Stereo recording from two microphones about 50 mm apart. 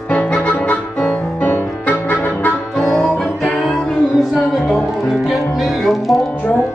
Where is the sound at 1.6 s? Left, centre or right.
Left.